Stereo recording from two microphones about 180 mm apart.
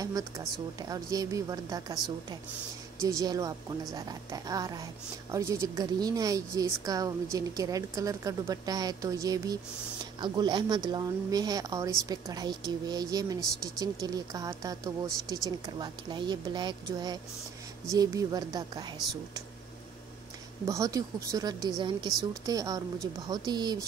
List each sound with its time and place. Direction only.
0.0 s speech: 20° right (ahead or behind)
3.0 s speech: 20° right (ahead or behind)
20.6 s speech: 15° right (ahead or behind)